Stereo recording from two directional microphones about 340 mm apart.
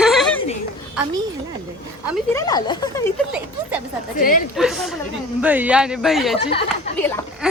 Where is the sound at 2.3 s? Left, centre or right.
Centre.